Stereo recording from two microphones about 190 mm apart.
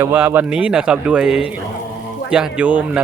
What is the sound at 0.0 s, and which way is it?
A man's voice, 10° right (ahead or behind).